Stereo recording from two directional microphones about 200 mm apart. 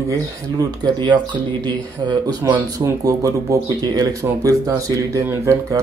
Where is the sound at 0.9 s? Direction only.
20° right (ahead or behind).